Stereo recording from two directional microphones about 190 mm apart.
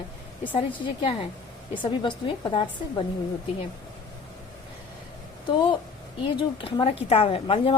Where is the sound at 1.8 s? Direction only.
25° left (ahead or behind).